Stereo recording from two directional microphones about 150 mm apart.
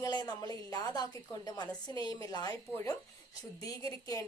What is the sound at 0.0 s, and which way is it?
A woman's voice, 25° left (ahead or behind).